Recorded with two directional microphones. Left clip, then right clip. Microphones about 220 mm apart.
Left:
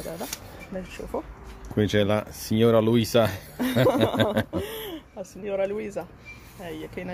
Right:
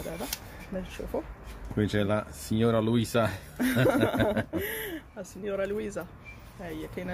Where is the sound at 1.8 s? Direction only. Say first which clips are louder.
Left 5 dB; 35° left (ahead or behind).